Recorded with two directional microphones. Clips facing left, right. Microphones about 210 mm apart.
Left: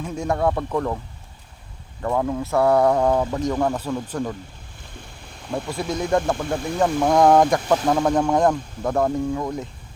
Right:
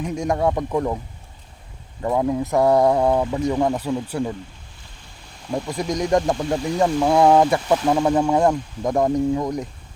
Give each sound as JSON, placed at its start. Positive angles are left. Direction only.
{"t": 0.0, "sound": "speech", "side_deg": -15}
{"t": 2.0, "sound": "speech", "side_deg": -15}
{"t": 5.6, "sound": "speech", "side_deg": -15}